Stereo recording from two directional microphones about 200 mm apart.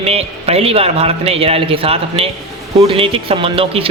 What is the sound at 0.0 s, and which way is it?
A man's voice, 30° right (ahead or behind).